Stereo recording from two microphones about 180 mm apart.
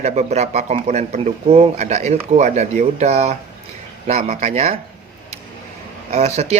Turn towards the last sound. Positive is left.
turn(degrees=-40)  # may be behind; listen again after turning